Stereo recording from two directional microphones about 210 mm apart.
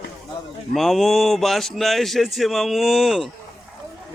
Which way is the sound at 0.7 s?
Centre (ahead or behind).